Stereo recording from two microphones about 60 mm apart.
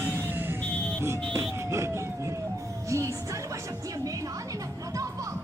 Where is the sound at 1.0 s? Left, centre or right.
Right.